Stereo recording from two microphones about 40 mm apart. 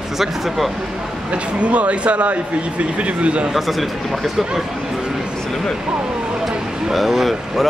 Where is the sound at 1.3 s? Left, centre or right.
Right.